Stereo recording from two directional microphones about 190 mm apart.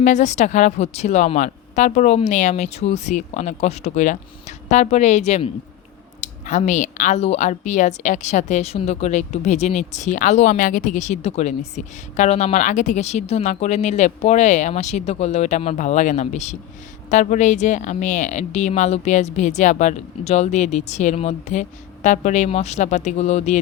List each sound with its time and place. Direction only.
0.0 s speech: 40° left (ahead or behind)